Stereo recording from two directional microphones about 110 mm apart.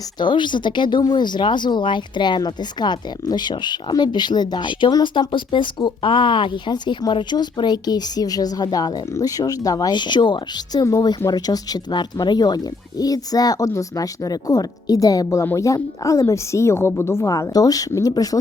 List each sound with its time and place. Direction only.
0.2 s speech: 45° left (ahead or behind)
10.8 s a woman's voice: 30° left (ahead or behind)